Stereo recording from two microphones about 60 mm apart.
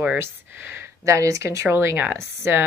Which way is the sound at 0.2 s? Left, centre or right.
Right.